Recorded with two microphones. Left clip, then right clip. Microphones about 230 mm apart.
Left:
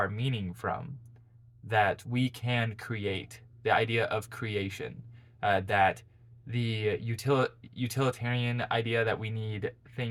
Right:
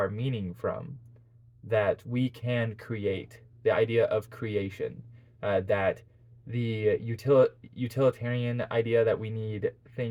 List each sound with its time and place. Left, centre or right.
0.0 s speech: centre